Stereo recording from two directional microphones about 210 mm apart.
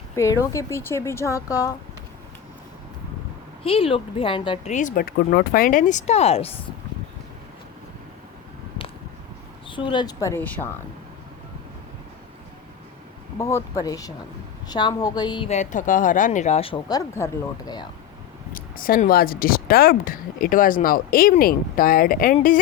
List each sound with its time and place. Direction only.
0.2 s a woman's voice: 15° left (ahead or behind)
3.6 s speech: 25° left (ahead or behind)
9.6 s a woman's voice: 25° left (ahead or behind)
13.4 s a woman's voice: 15° left (ahead or behind)
15.4 s a woman's voice: 35° left (ahead or behind); by 17.8 s 15° left (ahead or behind)
18.5 s speech: 40° left (ahead or behind)